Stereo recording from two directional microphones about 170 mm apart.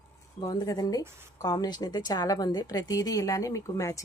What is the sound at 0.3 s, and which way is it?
A woman's voice, 25° left (ahead or behind).